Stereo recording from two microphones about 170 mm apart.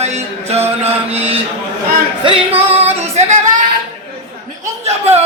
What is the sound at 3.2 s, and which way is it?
Speech, 45° right (ahead or behind).